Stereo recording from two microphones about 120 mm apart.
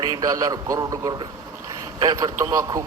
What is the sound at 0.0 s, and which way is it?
A man's voice, 35° right (ahead or behind).